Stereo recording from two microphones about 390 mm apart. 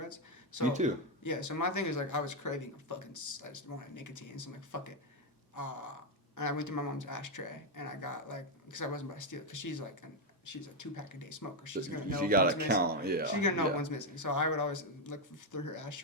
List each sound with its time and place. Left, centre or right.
0.0 s a sound: left
0.8 s speech: centre
1.2 s speech: left
12.2 s speech: right
13.4 s speech: left